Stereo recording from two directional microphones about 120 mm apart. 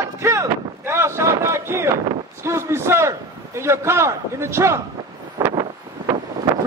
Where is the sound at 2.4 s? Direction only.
20° right (ahead or behind).